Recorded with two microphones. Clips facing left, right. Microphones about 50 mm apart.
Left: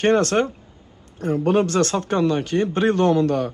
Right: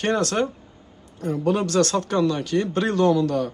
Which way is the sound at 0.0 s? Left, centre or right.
Left.